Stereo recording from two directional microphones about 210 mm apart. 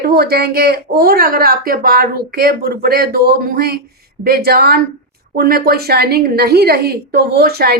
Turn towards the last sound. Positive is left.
turn(degrees=-50)  # may be behind; listen again after turning